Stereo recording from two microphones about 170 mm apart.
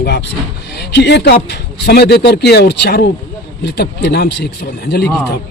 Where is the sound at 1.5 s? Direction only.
75° left (ahead or behind).